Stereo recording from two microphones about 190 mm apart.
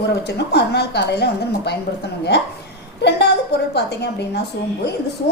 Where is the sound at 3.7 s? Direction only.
60° left (ahead or behind).